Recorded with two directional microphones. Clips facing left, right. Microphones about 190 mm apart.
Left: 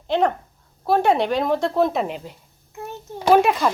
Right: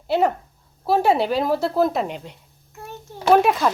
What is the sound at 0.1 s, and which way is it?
Speech, 10° right (ahead or behind).